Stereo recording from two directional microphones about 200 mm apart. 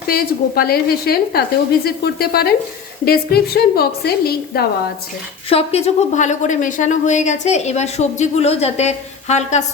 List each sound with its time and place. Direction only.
0.1 s a woman's voice: 50° left (ahead or behind)
5.5 s a woman's voice: 30° left (ahead or behind)